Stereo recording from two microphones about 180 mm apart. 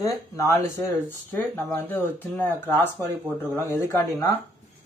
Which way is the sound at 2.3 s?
10° left (ahead or behind).